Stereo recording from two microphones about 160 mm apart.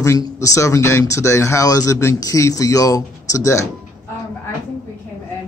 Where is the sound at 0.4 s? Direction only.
20° left (ahead or behind).